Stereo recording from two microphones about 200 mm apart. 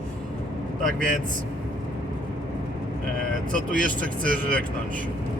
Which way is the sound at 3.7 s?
40° right (ahead or behind).